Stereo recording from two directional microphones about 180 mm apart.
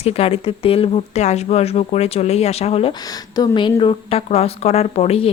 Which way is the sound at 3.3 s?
25° left (ahead or behind).